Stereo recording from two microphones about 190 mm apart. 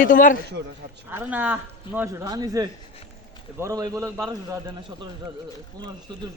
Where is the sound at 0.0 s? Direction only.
45° left (ahead or behind).